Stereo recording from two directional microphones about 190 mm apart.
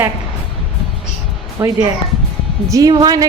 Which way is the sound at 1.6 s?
15° right (ahead or behind).